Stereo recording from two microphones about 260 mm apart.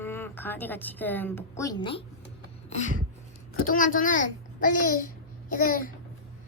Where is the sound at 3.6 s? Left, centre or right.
Left.